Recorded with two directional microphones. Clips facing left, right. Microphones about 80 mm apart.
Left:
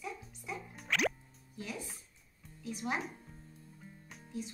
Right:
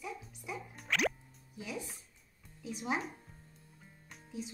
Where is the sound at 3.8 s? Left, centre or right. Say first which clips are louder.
Left 1 dB; centre.